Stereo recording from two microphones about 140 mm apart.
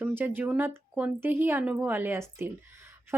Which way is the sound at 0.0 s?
15° right (ahead or behind).